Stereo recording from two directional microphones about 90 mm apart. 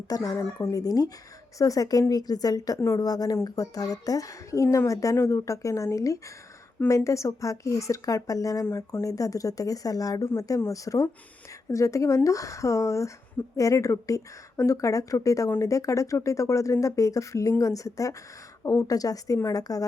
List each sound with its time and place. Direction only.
0.1 s speech: 40° left (ahead or behind)